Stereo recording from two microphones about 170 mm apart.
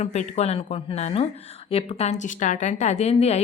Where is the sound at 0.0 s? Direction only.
40° left (ahead or behind).